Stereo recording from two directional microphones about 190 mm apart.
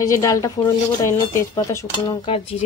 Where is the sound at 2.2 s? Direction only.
30° left (ahead or behind).